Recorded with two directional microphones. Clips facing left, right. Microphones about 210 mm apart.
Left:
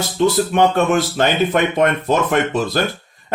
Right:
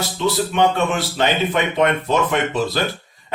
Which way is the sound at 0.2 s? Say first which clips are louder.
Left 4 dB; 50° left (ahead or behind).